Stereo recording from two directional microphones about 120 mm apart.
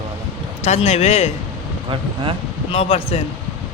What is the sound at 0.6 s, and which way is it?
Speech, 65° left (ahead or behind).